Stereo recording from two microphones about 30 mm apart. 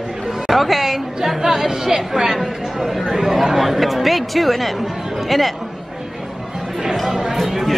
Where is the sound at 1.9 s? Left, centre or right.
Centre.